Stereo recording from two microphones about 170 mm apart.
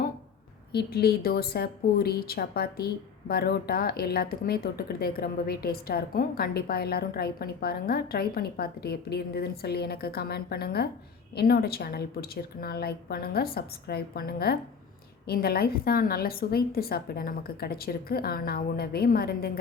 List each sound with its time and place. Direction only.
0.7 s a woman's voice: 70° left (ahead or behind)